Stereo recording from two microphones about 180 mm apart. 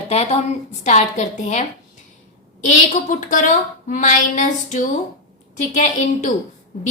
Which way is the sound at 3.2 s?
45° left (ahead or behind).